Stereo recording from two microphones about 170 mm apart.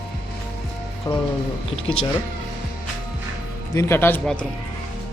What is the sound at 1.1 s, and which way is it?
Speech, 25° left (ahead or behind).